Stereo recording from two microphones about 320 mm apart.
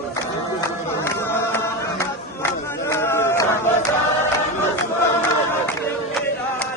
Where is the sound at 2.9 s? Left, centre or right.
Centre.